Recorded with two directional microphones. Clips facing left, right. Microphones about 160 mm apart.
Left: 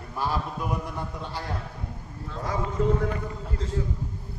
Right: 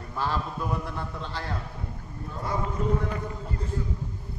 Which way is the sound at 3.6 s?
90° left.